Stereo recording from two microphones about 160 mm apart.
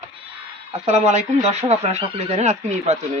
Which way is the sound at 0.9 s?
45° right (ahead or behind).